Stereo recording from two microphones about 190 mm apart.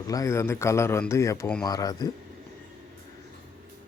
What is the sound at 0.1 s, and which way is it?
A man's voice, 15° left (ahead or behind).